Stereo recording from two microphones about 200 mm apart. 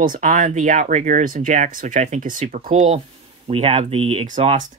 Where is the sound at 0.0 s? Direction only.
40° right (ahead or behind).